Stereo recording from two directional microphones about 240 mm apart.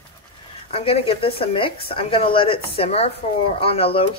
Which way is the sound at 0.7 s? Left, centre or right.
Left.